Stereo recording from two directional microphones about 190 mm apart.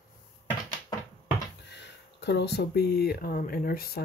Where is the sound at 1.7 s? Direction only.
65° left (ahead or behind).